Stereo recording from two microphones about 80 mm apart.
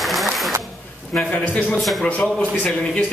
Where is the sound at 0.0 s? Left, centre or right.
Centre.